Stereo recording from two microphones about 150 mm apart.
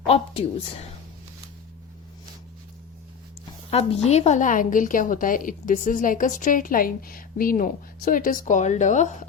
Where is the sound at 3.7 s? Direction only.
45° left (ahead or behind).